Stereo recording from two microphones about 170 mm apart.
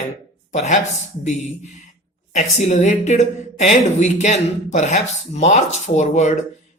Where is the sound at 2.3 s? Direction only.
40° left (ahead or behind).